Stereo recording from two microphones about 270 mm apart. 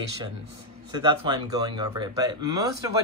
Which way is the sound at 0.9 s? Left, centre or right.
Centre.